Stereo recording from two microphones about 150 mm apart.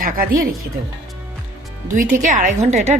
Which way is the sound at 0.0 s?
65° right (ahead or behind).